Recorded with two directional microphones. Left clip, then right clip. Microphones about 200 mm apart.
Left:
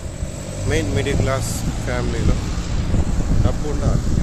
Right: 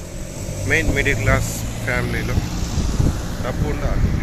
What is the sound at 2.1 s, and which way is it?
Vehicle, 60° right (ahead or behind).